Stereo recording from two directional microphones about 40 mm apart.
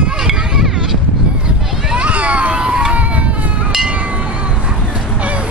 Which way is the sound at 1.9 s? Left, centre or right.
Right.